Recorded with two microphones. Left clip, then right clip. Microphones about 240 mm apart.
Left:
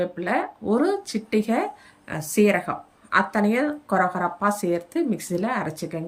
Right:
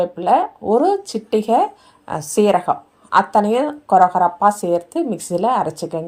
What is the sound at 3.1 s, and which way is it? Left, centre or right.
A woman's voice, centre.